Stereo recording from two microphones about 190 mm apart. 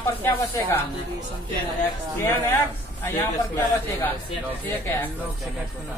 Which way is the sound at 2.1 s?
10° left (ahead or behind).